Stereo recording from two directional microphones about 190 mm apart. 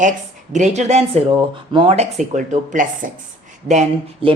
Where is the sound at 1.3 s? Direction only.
25° right (ahead or behind).